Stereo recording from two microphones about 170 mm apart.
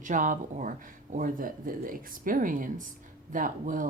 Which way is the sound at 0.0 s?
50° right (ahead or behind).